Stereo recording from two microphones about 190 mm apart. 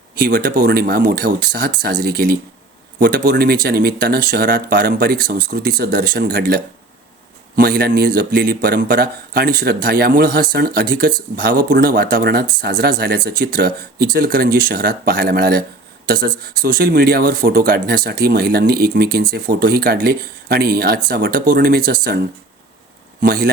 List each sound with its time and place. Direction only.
0.2 s a man's voice: 60° right (ahead or behind)
23.2 s a man's voice: 50° right (ahead or behind)